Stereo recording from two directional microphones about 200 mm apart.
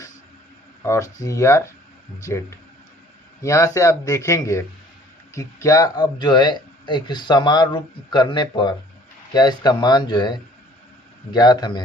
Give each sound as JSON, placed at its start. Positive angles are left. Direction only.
{"t": 0.8, "sound": "speech", "side_deg": 15}